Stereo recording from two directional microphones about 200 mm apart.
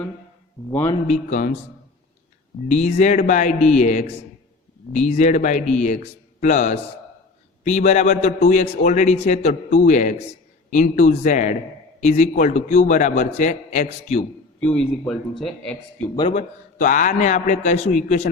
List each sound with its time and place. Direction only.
0.7 s a man's voice: 10° left (ahead or behind)
1.0 s a man's voice: 35° left (ahead or behind)
2.6 s a man's voice: 35° left (ahead or behind)
14.6 s a man's voice: 5° left (ahead or behind)
16.3 s a man's voice: 40° left (ahead or behind)